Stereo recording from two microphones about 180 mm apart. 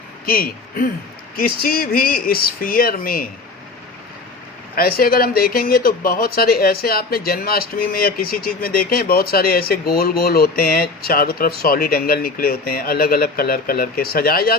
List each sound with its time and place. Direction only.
0.3 s speech: 55° left (ahead or behind)
4.7 s speech: 55° left (ahead or behind)